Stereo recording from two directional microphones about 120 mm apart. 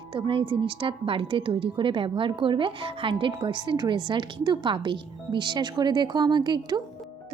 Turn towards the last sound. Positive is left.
turn(degrees=-35)  # may be behind; listen again after turning